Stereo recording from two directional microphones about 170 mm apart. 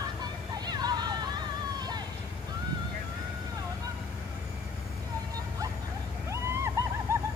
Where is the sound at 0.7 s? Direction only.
25° right (ahead or behind).